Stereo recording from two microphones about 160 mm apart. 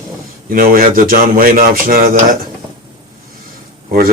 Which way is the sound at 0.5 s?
65° right (ahead or behind).